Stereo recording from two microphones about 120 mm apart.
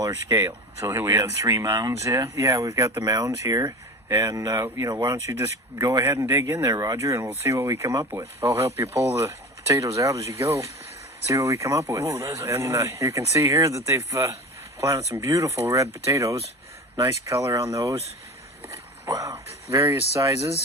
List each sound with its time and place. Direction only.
0.0 s speech: 25° right (ahead or behind)
19.0 s speech: 25° right (ahead or behind)